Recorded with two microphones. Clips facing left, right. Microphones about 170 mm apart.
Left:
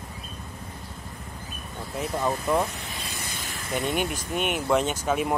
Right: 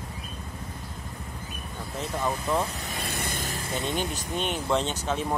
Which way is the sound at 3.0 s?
55° right (ahead or behind).